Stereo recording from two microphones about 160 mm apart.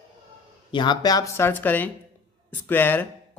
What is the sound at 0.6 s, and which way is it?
Speech, 30° left (ahead or behind).